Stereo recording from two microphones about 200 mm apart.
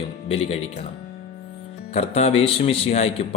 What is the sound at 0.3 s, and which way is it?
Speech, 30° left (ahead or behind).